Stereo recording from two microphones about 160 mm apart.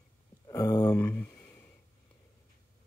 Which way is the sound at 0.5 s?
25° left (ahead or behind).